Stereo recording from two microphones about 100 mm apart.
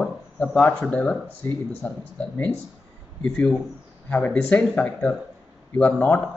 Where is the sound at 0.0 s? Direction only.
10° left (ahead or behind).